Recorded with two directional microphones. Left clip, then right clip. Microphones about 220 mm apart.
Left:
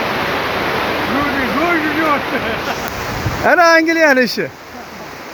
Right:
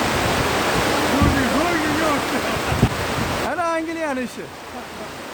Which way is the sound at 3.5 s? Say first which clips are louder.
Left 13 dB; 30° left (ahead or behind).